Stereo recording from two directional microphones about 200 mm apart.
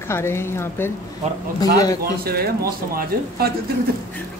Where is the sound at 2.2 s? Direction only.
50° right (ahead or behind).